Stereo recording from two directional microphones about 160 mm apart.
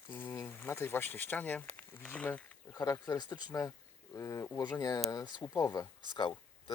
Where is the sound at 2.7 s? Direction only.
20° left (ahead or behind).